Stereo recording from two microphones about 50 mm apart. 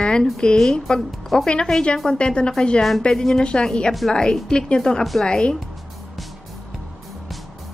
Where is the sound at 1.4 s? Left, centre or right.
Centre.